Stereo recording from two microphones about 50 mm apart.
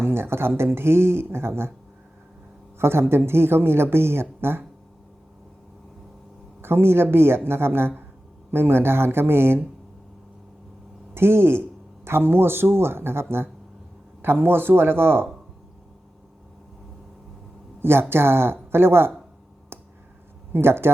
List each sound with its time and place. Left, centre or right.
0.0 s speech: right
2.7 s speech: right
6.6 s speech: right
11.1 s speech: right
17.7 s a sound: right
18.1 s speech: right
19.7 s a sound: right
20.5 s speech: right